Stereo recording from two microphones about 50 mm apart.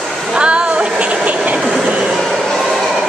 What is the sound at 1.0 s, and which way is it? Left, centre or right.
Vehicle, right.